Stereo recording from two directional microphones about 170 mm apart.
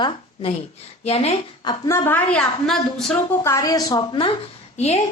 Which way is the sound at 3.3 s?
15° left (ahead or behind).